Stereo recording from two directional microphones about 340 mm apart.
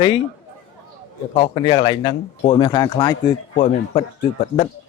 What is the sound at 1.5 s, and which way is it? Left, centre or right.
Speech, centre.